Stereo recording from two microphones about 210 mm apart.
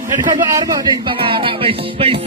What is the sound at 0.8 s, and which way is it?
Music, 20° right (ahead or behind).